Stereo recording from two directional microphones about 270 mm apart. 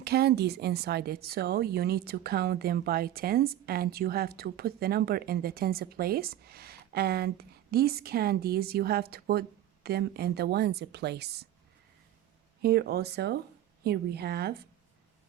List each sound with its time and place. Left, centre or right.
0.0 s speech: right
12.6 s speech: right